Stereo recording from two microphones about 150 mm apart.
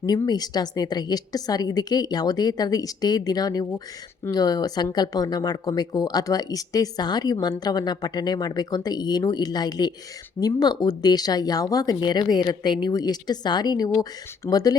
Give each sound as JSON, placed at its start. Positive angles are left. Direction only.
{"t": 0.0, "sound": "speech", "side_deg": 25}